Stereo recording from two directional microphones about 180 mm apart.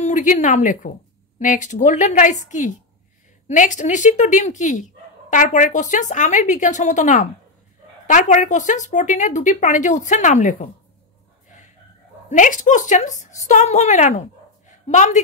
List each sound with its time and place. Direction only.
0.0 s speech: 45° left (ahead or behind)
12.3 s a woman's voice: 45° left (ahead or behind)